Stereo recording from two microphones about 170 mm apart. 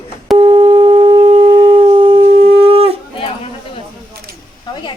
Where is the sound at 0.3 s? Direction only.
25° right (ahead or behind).